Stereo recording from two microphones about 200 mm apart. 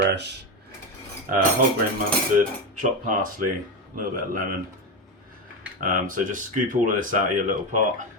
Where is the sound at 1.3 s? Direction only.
45° right (ahead or behind).